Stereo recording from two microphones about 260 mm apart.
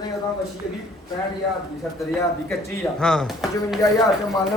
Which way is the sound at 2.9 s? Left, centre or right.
Centre.